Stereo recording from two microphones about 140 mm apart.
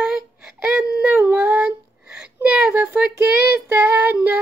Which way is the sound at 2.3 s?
10° right (ahead or behind).